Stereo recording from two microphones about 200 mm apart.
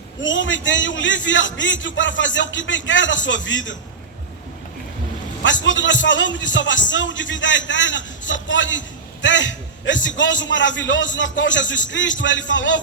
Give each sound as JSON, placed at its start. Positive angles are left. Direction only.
{"t": 0.2, "sound": "a man's voice", "side_deg": 65}
{"t": 5.4, "sound": "a man's voice", "side_deg": 65}